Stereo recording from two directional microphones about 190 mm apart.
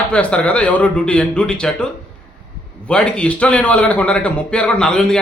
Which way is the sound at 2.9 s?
5° left (ahead or behind).